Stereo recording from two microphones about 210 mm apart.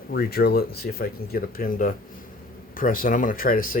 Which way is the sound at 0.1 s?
50° left (ahead or behind).